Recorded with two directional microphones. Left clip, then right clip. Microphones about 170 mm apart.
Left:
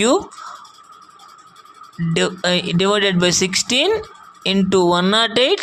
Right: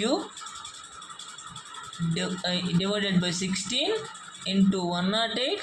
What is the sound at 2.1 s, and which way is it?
Speech, 50° left (ahead or behind).